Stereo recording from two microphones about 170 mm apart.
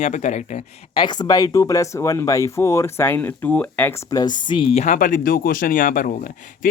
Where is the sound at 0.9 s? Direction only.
30° left (ahead or behind); by 3.9 s 10° left (ahead or behind).